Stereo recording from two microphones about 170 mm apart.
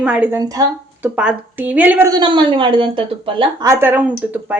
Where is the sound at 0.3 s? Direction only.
20° right (ahead or behind).